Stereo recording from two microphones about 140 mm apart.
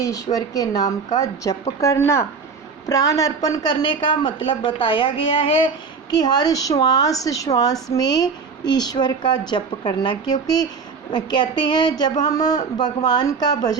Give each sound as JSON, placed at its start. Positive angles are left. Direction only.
{"t": 0.0, "sound": "a woman's voice", "side_deg": 25}